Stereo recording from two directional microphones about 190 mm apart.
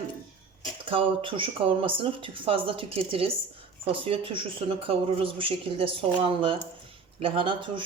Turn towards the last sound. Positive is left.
turn(degrees=-25)  # may be behind; listen again after turning